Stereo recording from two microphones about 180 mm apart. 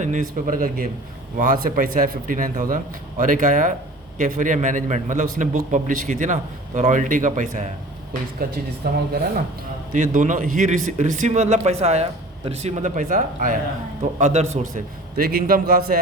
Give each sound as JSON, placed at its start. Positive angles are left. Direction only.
{"t": 0.0, "sound": "a man's voice", "side_deg": -45}
{"t": 8.8, "sound": "a man's voice", "side_deg": -60}
{"t": 9.9, "sound": "a man's voice", "side_deg": -45}
{"t": 15.1, "sound": "a man's voice", "side_deg": -55}